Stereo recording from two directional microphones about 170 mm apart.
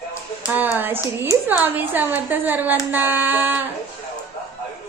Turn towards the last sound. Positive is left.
turn(degrees=-10)  # may be behind; listen again after turning